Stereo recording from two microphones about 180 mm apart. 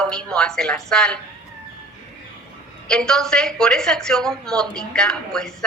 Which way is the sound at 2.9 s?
5° left (ahead or behind).